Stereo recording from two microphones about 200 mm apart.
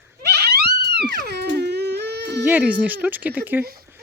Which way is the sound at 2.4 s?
5° right (ahead or behind).